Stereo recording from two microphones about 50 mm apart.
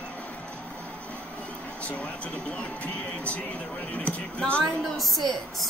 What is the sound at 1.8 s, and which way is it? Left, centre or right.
Music, left.